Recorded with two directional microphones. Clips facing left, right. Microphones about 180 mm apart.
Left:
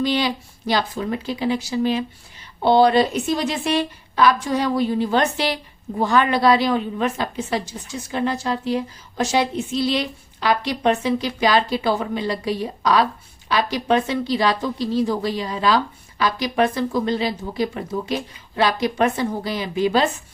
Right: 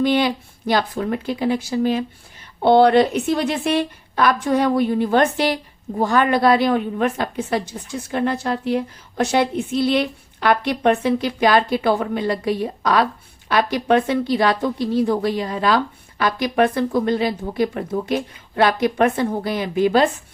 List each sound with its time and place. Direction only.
0.0 s speech: 55° right (ahead or behind)
2.6 s a woman's voice: 60° right (ahead or behind)